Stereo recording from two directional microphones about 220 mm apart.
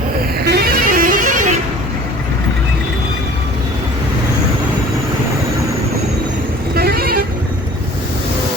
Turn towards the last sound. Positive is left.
turn(degrees=-45)  # may be behind; listen again after turning